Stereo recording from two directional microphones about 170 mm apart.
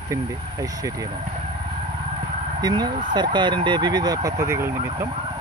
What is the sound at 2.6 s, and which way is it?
Speech, 25° right (ahead or behind).